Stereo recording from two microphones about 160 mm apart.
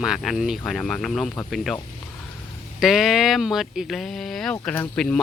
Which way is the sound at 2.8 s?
Centre (ahead or behind).